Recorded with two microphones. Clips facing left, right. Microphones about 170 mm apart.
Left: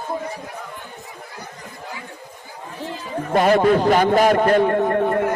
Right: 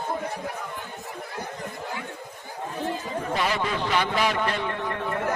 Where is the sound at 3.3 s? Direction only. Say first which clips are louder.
Left 13 dB; 50° left (ahead or behind).